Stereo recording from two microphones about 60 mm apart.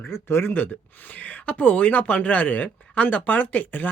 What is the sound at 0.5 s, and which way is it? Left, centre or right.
Speech, left.